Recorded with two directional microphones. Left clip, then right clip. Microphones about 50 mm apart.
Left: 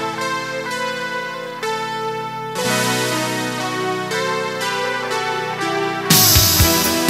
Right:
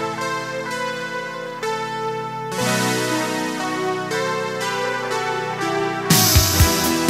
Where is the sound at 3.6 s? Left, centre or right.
Right.